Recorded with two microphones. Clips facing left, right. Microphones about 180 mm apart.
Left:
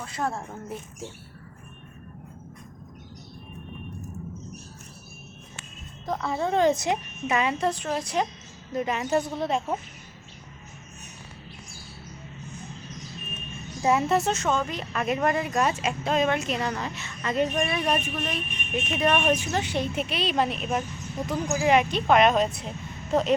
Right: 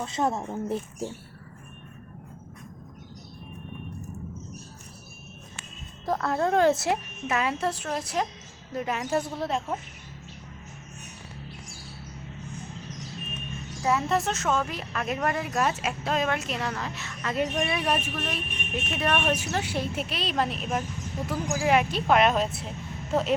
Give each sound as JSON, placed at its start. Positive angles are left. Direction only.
{"t": 0.0, "sound": "a woman's voice", "side_deg": -25}
{"t": 6.1, "sound": "speech", "side_deg": 0}
{"t": 14.1, "sound": "speech", "side_deg": 0}